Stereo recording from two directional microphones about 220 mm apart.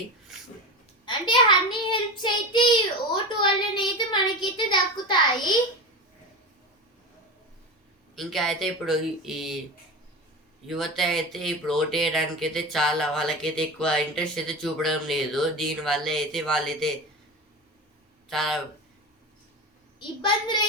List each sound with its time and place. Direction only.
0.3 s a sound: centre (ahead or behind)
1.0 s a child's voice: 20° left (ahead or behind)
8.1 s speech: centre (ahead or behind)
10.7 s speech: centre (ahead or behind)
18.3 s speech: centre (ahead or behind)
20.0 s a child's voice: 20° left (ahead or behind)